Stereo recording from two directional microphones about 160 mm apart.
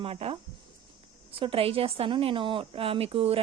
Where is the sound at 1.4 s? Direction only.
35° right (ahead or behind).